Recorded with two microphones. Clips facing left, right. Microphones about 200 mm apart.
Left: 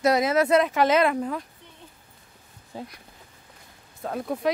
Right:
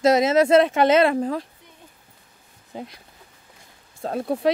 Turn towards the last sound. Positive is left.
turn(degrees=-30)  # may be behind; listen again after turning